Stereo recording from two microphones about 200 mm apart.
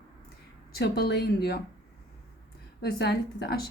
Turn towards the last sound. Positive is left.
turn(degrees=55)  # may be behind; listen again after turning